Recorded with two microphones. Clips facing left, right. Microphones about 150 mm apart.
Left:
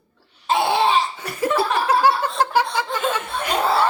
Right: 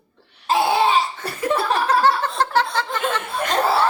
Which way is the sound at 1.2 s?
30° right (ahead or behind).